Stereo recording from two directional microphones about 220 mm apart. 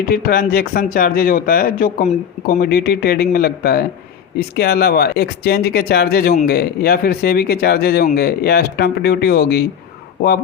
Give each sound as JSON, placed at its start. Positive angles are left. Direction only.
{"t": 0.1, "sound": "speech", "side_deg": 45}